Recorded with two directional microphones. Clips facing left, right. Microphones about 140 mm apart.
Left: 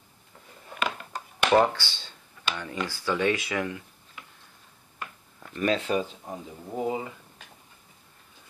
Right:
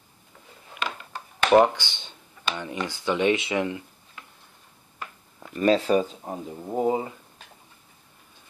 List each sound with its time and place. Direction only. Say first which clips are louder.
1.5 s speech: right 4 dB; 15° right (ahead or behind)
5.6 s speech: right 5 dB; 35° right (ahead or behind)